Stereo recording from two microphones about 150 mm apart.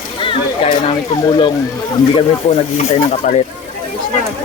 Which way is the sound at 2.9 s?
40° left (ahead or behind).